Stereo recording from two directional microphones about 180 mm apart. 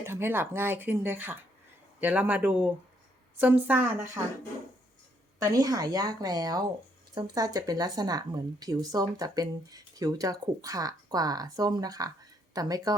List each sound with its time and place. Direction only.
0.0 s speech: 15° right (ahead or behind)
5.4 s speech: 20° right (ahead or behind)